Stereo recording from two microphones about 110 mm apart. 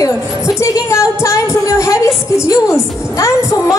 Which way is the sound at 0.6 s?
25° left (ahead or behind).